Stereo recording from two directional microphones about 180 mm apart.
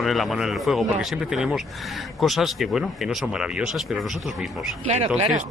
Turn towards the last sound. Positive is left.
turn(degrees=-35)  # may be behind; listen again after turning